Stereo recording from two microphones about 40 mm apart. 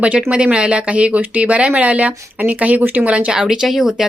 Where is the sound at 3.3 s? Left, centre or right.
Centre.